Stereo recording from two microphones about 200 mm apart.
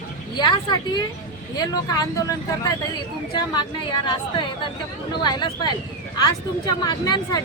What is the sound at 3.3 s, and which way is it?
A woman's voice, 20° left (ahead or behind).